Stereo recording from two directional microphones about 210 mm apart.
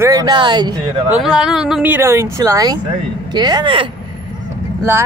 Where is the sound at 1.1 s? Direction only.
5° right (ahead or behind); by 3.9 s 25° right (ahead or behind).